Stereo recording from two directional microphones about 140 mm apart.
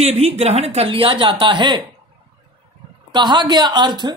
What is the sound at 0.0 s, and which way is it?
Speech, 50° right (ahead or behind).